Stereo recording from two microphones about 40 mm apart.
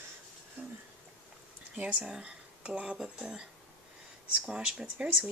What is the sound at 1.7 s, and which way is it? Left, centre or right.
Speech, right.